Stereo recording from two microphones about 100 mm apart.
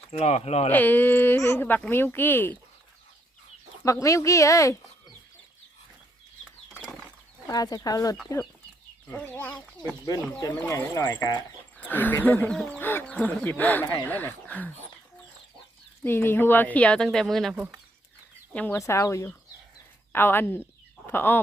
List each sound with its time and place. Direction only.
0.1 s speech: 90° left
0.7 s speech: 20° left (ahead or behind)
3.8 s speech: 30° left (ahead or behind)
7.4 s speech: 40° left (ahead or behind)
9.1 s speech: 20° left (ahead or behind)
10.7 s speech: 30° left (ahead or behind)
11.0 s speech: 40° left (ahead or behind)
11.9 s speech: 20° left (ahead or behind)
16.0 s speech: 20° left (ahead or behind); by 17.5 s centre (ahead or behind)
18.5 s speech: 15° left (ahead or behind)
18.8 s speech: 30° left (ahead or behind)